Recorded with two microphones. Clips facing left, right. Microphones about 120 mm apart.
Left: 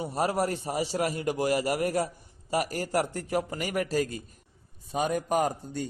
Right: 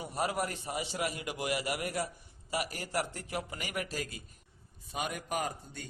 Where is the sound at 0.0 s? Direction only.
35° left (ahead or behind).